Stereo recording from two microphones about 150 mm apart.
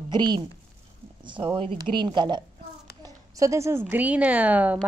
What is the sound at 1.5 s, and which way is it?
Speech, 35° right (ahead or behind).